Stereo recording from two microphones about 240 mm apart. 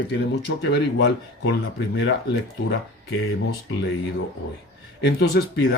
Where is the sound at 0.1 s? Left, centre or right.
Left.